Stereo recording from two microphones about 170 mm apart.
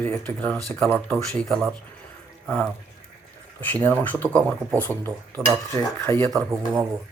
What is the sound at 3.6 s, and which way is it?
Speech, 10° left (ahead or behind).